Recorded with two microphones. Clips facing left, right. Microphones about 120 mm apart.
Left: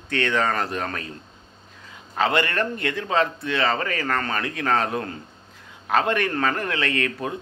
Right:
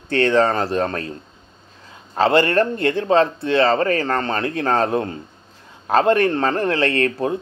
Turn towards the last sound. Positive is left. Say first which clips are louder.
# right 7 dB
turn(degrees=-35)  # may be behind; listen again after turning